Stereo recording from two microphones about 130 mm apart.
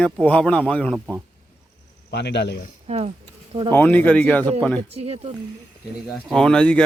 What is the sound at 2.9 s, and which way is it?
Speech, 55° right (ahead or behind).